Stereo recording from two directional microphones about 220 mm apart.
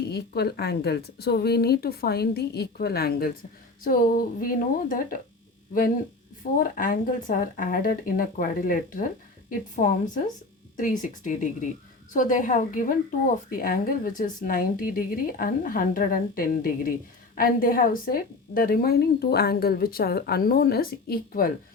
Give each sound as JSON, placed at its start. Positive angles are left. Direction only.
{"t": 0.1, "sound": "a woman's voice", "side_deg": 50}
{"t": 6.6, "sound": "a woman's voice", "side_deg": 40}